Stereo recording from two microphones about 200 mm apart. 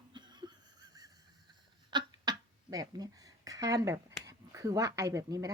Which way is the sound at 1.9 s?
20° right (ahead or behind).